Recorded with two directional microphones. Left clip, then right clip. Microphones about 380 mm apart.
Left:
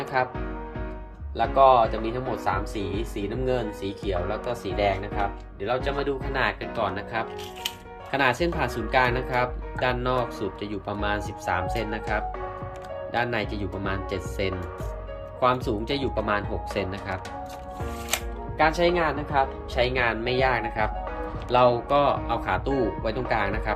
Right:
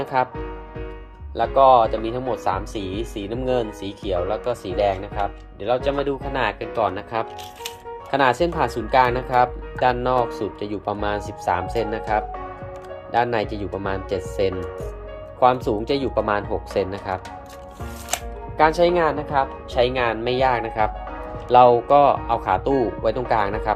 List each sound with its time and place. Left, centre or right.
0.1 s speech: centre
1.4 s speech: centre
13.1 s speech: centre